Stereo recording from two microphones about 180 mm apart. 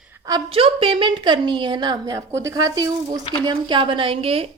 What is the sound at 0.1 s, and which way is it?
A woman's voice, 20° right (ahead or behind).